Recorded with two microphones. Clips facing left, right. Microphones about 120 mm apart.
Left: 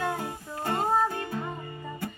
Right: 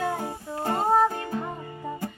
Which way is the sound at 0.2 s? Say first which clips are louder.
Right 3 dB; 25° right (ahead or behind).